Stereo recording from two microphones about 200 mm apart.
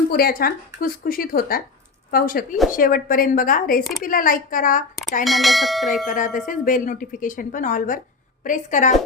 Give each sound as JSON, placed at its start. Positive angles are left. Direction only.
{"t": 0.1, "sound": "speech", "side_deg": 50}
{"t": 5.2, "sound": "bell", "side_deg": 0}
{"t": 6.1, "sound": "speech", "side_deg": 40}